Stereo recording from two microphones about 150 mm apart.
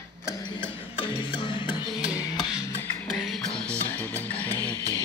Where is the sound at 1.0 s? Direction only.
35° left (ahead or behind).